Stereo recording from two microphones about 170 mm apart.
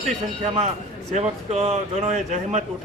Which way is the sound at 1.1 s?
40° right (ahead or behind).